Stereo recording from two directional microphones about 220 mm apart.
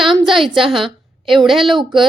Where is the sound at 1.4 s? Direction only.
Centre (ahead or behind).